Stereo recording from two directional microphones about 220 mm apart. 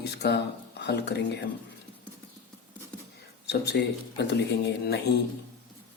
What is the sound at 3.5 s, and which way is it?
Speech, 50° left (ahead or behind).